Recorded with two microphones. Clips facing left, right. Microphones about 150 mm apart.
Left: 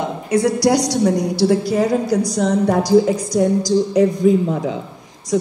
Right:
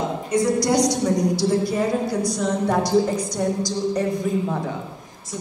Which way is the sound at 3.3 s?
90° left.